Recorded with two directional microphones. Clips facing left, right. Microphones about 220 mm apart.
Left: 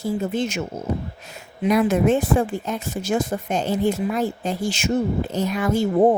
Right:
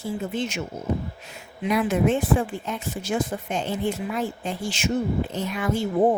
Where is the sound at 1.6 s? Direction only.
40° left (ahead or behind).